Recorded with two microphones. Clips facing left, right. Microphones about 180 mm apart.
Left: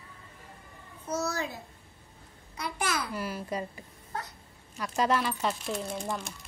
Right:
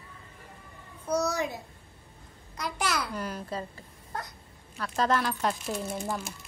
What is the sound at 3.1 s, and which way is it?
Babbling, 5° left (ahead or behind).